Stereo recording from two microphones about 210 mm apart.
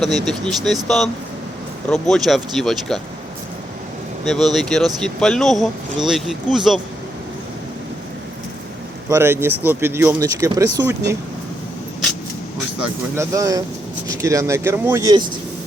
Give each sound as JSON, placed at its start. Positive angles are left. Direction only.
{"t": 0.3, "sound": "speech", "side_deg": 0}
{"t": 4.5, "sound": "speech", "side_deg": 0}
{"t": 9.0, "sound": "speech", "side_deg": -10}
{"t": 13.1, "sound": "speech", "side_deg": -15}